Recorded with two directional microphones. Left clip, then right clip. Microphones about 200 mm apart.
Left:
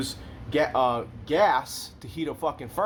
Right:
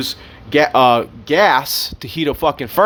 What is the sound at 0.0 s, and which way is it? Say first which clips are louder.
Speech: right 10 dB; 45° right (ahead or behind).